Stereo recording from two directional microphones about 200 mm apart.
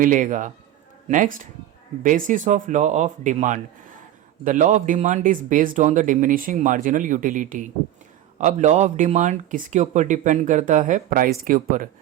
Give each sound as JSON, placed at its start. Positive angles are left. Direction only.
{"t": 0.0, "sound": "speech", "side_deg": -40}